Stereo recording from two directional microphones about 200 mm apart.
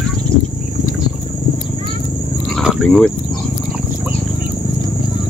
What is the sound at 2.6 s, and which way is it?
Vehicle, centre (ahead or behind).